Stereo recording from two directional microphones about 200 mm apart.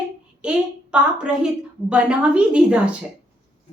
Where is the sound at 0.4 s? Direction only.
5° right (ahead or behind).